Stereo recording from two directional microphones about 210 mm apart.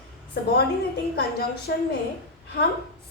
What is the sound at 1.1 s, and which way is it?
Speech, 50° left (ahead or behind).